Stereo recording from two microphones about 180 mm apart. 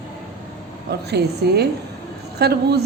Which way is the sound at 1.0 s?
65° right (ahead or behind).